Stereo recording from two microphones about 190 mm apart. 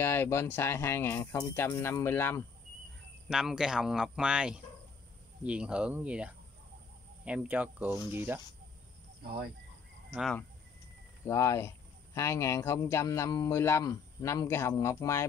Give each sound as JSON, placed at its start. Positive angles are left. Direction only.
{"t": 0.0, "sound": "speech", "side_deg": 10}
{"t": 3.3, "sound": "speech", "side_deg": 0}
{"t": 9.2, "sound": "speech", "side_deg": -55}
{"t": 10.1, "sound": "speech", "side_deg": 0}
{"t": 11.2, "sound": "speech", "side_deg": 15}